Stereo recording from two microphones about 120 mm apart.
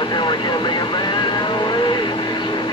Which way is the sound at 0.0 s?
40° left (ahead or behind).